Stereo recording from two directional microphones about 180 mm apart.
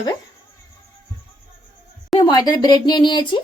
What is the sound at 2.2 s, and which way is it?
Speech, 20° left (ahead or behind).